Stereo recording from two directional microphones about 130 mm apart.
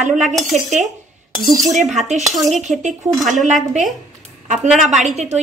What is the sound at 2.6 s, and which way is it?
Speech, 65° right (ahead or behind).